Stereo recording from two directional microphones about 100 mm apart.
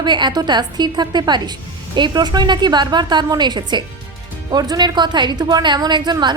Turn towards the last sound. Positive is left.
turn(degrees=-45)  # may be behind; listen again after turning